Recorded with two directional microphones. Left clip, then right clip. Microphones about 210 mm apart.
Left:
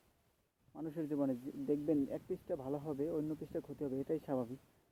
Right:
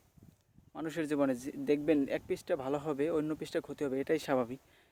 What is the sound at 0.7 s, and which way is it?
A man's voice, 30° right (ahead or behind).